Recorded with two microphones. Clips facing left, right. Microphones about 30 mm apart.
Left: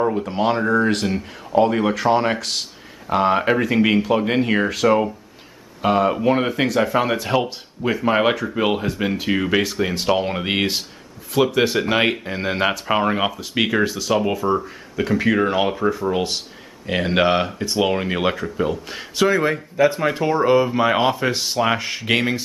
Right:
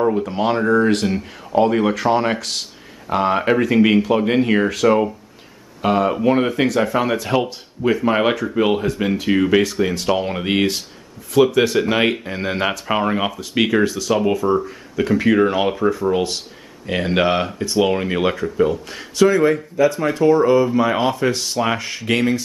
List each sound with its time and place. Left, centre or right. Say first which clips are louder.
0.0 s speech: right 1 dB; centre
19.8 s speech: right 1 dB; left